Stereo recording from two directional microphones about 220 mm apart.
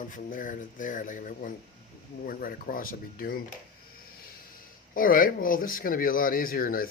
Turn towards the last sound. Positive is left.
turn(degrees=40)  # may be behind; listen again after turning